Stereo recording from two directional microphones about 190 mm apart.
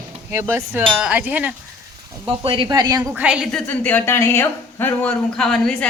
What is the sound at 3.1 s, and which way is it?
Speech, 5° right (ahead or behind).